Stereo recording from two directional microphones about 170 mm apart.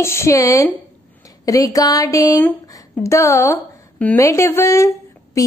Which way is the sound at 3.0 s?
15° left (ahead or behind).